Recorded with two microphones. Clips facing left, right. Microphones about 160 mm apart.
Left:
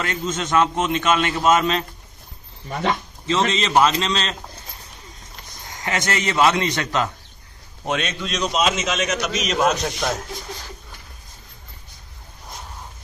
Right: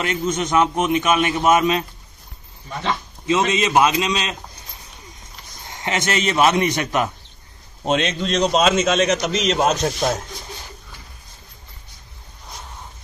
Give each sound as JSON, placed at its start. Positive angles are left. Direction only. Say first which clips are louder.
{"t": 0.0, "sound": "a man's voice", "louder": "right 3 dB", "side_deg": -15}
{"t": 3.3, "sound": "a man's voice", "louder": "right 2 dB", "side_deg": -15}
{"t": 5.7, "sound": "a man's voice", "louder": "right 2 dB", "side_deg": -25}
{"t": 8.5, "sound": "speech", "louder": "right 4 dB", "side_deg": -35}